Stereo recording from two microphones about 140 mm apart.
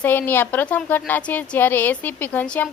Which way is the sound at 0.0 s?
15° left (ahead or behind).